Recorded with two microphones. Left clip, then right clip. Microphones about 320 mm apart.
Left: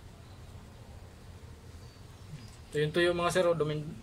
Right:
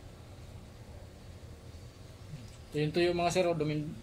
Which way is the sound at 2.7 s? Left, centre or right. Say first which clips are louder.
Left 2 dB; left.